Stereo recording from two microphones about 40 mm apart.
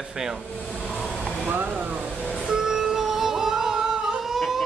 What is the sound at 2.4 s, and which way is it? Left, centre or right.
Music, centre.